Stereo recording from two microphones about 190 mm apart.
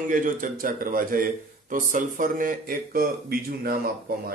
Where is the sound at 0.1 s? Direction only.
45° right (ahead or behind).